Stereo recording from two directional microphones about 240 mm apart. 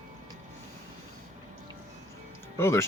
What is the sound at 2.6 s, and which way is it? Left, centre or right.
Speech, centre.